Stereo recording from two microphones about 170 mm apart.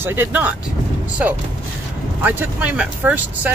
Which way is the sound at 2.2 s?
10° right (ahead or behind).